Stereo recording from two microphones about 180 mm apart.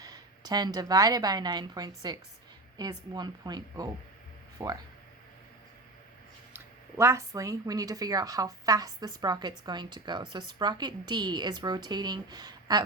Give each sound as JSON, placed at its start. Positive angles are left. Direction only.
{"t": 0.0, "sound": "speech", "side_deg": -20}
{"t": 6.5, "sound": "speech", "side_deg": -15}